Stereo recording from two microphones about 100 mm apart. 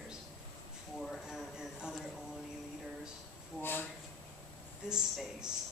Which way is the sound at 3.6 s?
20° left (ahead or behind).